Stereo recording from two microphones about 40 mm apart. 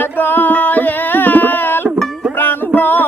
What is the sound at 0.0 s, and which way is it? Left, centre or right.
Music, left.